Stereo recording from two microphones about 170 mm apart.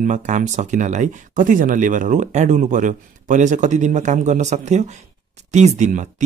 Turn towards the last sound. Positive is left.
turn(degrees=-45)  # may be behind; listen again after turning